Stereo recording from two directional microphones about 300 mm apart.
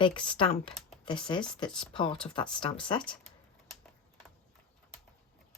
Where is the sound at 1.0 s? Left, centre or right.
Centre.